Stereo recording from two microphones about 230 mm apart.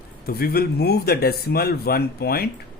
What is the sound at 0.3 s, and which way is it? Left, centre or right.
Speech, left.